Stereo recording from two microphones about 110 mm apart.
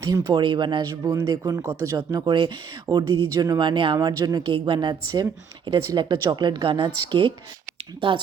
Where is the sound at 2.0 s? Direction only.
45° right (ahead or behind).